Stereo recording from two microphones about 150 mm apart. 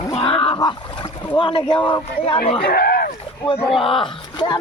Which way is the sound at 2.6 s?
90° left.